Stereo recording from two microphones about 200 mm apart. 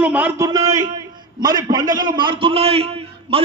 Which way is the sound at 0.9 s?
20° right (ahead or behind).